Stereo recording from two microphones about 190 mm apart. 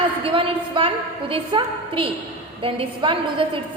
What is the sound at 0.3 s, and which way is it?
A woman's voice, 30° right (ahead or behind).